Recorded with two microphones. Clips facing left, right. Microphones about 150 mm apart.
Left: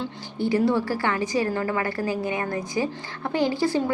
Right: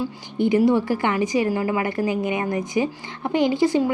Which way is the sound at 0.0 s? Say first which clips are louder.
Right 5 dB; 20° right (ahead or behind).